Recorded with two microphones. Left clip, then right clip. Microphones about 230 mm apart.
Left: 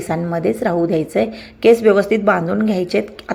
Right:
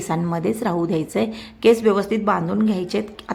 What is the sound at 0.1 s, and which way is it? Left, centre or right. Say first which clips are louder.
A woman's voice: left 4 dB; centre.